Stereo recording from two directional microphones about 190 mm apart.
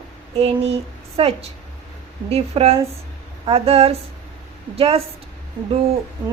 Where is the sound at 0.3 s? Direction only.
35° right (ahead or behind).